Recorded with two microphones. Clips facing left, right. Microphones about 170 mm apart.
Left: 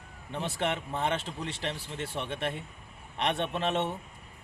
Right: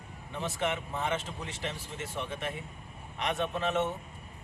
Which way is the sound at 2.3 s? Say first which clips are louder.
Left 3 dB; 60° left (ahead or behind).